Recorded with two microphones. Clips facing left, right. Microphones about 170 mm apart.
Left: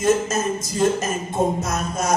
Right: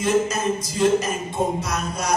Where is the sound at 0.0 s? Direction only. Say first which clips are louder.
Left 1 dB; 45° left (ahead or behind).